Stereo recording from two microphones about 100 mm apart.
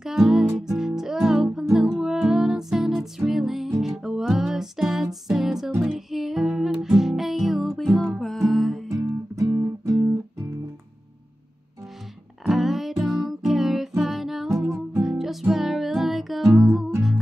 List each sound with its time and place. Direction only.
0.0 s music: 5° right (ahead or behind)
9.4 s music: 30° right (ahead or behind)
12.4 s music: centre (ahead or behind)